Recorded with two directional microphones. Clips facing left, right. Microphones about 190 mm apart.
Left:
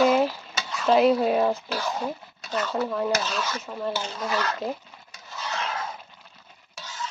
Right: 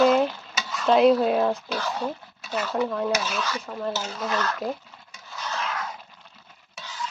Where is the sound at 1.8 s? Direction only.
10° left (ahead or behind).